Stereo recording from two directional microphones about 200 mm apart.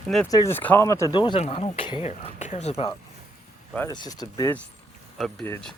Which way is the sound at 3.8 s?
20° left (ahead or behind).